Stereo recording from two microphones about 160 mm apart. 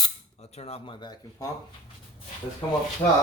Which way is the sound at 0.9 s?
25° left (ahead or behind).